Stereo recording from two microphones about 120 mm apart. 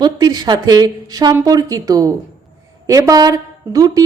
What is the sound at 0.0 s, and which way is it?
A woman's voice, 35° right (ahead or behind).